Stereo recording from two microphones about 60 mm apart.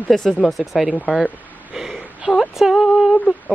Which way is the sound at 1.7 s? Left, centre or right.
Centre.